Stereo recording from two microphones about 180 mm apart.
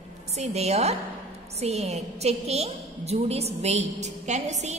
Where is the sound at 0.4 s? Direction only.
35° right (ahead or behind).